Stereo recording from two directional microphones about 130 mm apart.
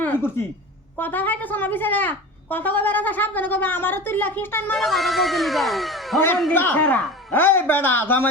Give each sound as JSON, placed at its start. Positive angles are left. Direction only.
{"t": 0.0, "sound": "a sound", "side_deg": 15}
{"t": 0.9, "sound": "a woman's voice", "side_deg": 15}
{"t": 4.7, "sound": "speech", "side_deg": 0}
{"t": 6.5, "sound": "a woman's voice", "side_deg": 15}